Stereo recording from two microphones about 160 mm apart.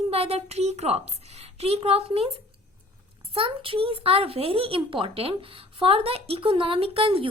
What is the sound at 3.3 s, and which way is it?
A woman's voice, 35° right (ahead or behind).